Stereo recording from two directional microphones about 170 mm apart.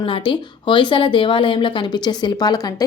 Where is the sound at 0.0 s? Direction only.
30° left (ahead or behind).